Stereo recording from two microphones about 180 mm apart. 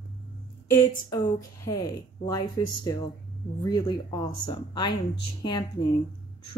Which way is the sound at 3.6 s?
20° left (ahead or behind).